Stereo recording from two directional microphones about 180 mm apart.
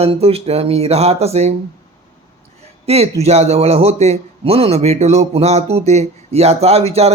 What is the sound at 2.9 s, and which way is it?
Speech, 35° right (ahead or behind).